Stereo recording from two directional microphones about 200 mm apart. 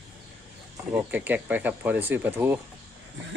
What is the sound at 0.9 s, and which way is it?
Speech, 10° right (ahead or behind).